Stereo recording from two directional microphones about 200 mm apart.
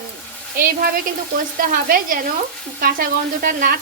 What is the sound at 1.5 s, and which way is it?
A woman's voice, 45° right (ahead or behind).